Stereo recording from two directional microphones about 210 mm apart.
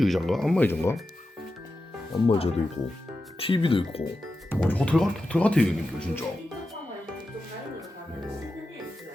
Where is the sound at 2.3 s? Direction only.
25° left (ahead or behind).